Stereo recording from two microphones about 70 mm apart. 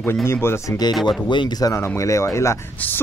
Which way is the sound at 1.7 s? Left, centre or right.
Left.